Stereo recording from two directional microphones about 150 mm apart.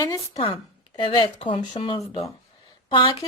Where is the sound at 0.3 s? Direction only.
40° left (ahead or behind).